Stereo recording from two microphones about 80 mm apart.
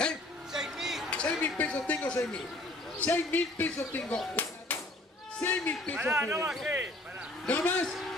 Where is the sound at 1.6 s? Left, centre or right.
Centre.